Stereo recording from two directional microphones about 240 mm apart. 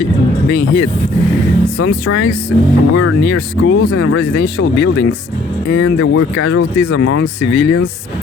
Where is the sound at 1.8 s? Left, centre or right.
Left.